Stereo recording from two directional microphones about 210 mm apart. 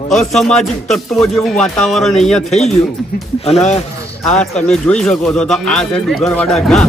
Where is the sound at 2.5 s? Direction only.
35° left (ahead or behind).